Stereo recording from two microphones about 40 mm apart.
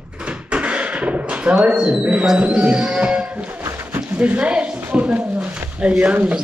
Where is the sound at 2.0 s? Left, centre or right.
Right.